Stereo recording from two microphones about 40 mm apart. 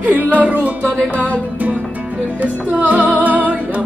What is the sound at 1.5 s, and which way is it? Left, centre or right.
Music, right.